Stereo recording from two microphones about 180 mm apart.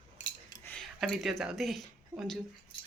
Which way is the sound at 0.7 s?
5° left (ahead or behind).